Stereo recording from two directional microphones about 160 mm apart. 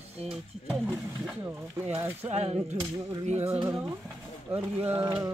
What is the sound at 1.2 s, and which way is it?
Speech, 10° right (ahead or behind).